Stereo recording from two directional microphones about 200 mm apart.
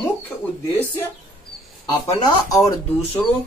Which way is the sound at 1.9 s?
20° left (ahead or behind).